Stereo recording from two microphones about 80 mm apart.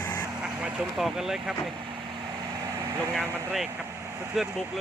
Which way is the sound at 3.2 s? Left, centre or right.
Centre.